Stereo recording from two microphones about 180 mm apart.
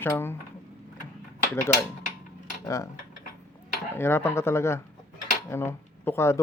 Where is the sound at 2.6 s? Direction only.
15° left (ahead or behind).